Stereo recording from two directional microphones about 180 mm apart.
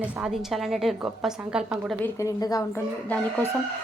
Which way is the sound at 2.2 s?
20° left (ahead or behind).